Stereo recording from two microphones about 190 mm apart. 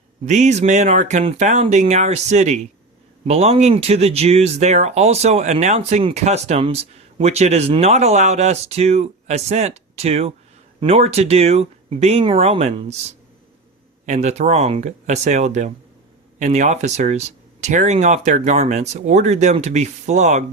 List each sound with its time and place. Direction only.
0.3 s speech: 40° right (ahead or behind)